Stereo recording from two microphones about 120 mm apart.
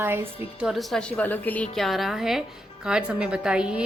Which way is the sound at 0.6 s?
Centre (ahead or behind).